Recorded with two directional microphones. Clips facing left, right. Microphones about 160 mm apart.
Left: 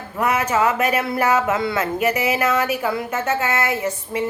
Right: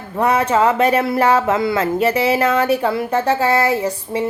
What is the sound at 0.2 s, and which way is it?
Speech, 30° right (ahead or behind).